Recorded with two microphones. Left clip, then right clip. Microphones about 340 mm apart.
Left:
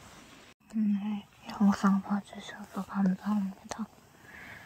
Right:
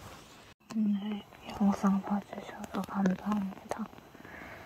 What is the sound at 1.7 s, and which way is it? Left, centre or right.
Speech, centre.